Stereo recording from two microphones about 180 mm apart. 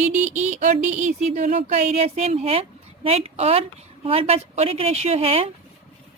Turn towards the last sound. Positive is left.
turn(degrees=-35)  # may be behind; listen again after turning